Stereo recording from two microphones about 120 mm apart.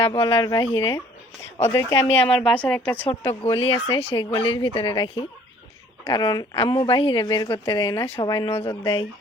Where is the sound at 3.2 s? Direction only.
20° left (ahead or behind).